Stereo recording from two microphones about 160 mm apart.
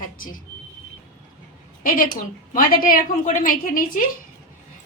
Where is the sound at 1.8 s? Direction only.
60° left (ahead or behind).